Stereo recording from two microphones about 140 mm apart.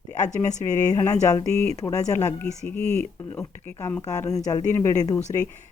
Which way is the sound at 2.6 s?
10° left (ahead or behind).